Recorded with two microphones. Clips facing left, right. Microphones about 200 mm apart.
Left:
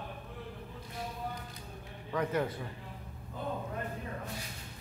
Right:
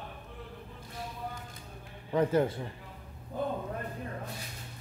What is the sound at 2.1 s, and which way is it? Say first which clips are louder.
Speech: right 6 dB; 30° right (ahead or behind).